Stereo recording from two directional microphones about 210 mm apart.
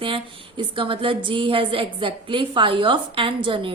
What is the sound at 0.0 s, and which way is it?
A woman's voice, 25° right (ahead or behind).